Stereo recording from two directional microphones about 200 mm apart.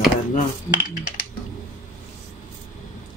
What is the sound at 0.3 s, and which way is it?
Cutlery, 40° left (ahead or behind).